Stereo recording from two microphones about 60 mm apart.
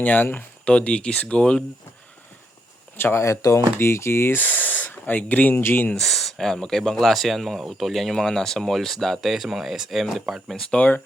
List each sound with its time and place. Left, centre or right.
0.0 s speech: left
0.6 s speech: centre
3.0 s speech: left
3.2 s speech: left
4.4 s speech: left
6.0 s speech: centre